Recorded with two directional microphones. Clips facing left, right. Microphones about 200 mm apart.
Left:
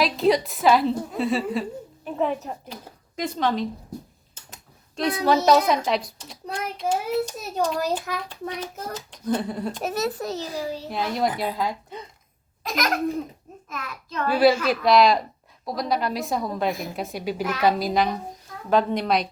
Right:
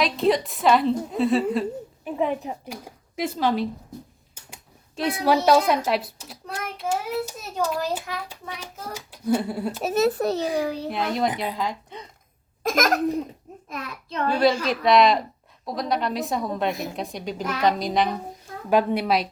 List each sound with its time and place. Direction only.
0.0 s a woman's voice: centre (ahead or behind)
10.2 s a child's voice: 60° right (ahead or behind)
10.8 s a woman's voice: centre (ahead or behind)
12.6 s laughter: 45° right (ahead or behind)
13.7 s a child's voice: 30° right (ahead or behind)
14.3 s a woman's voice: 5° left (ahead or behind)
18.7 s a child's voice: 10° right (ahead or behind)